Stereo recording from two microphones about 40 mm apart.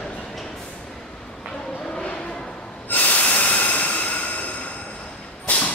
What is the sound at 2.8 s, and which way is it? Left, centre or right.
Snort, left.